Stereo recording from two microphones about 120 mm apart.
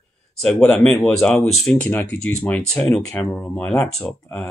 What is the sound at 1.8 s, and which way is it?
Speech, 15° left (ahead or behind).